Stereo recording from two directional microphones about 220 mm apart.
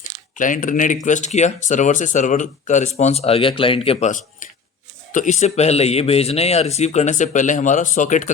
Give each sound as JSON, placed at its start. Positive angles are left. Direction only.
{"t": 0.3, "sound": "speech", "side_deg": 35}